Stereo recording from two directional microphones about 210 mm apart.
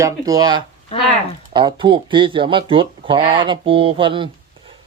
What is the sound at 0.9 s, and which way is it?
Speech, 30° left (ahead or behind).